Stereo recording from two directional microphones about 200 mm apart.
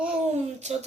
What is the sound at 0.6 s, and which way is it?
Speech, 35° right (ahead or behind).